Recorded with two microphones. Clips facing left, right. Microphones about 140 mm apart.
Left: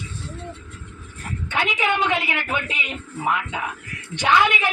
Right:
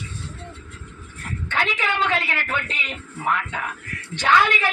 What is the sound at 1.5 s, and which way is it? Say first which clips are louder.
A woman's voice: left 2 dB; 15° left (ahead or behind).